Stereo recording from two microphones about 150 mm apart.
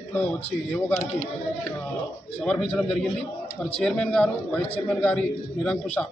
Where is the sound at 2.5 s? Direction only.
5° left (ahead or behind).